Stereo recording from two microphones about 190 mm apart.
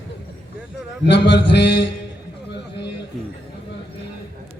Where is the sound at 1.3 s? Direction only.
70° left (ahead or behind).